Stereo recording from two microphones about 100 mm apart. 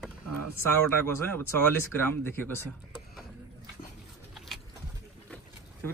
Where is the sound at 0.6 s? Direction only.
25° left (ahead or behind).